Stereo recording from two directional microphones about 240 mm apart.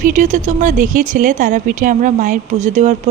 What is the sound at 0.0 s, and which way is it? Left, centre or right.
Speech, right.